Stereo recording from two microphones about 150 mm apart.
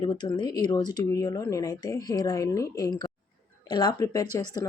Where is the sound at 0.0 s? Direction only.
30° left (ahead or behind).